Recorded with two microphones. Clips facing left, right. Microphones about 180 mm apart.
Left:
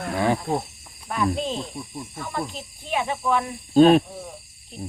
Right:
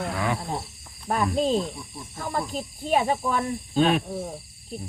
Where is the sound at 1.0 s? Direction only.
40° right (ahead or behind).